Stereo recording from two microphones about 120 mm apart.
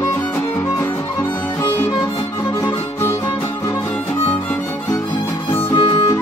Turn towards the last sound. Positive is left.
turn(degrees=45)  # may be behind; listen again after turning